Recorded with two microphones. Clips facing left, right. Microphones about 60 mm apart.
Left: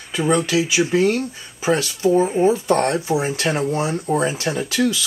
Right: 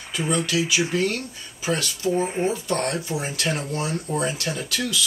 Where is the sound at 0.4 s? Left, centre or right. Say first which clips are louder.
Left 4 dB; left.